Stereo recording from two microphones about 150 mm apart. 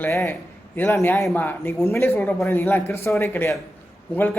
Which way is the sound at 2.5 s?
15° left (ahead or behind).